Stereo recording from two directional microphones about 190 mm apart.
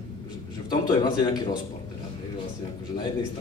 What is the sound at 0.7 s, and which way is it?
Speech, 25° left (ahead or behind).